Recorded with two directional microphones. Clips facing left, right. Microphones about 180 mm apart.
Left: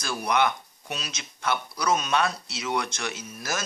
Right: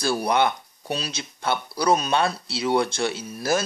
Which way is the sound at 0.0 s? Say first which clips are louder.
Right 4 dB; 30° right (ahead or behind).